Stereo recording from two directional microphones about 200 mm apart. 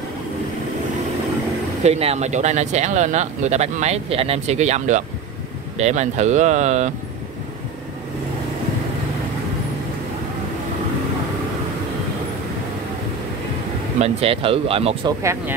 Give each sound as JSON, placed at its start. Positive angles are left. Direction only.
{"t": 1.8, "sound": "speech", "side_deg": -30}
{"t": 13.9, "sound": "speech", "side_deg": -30}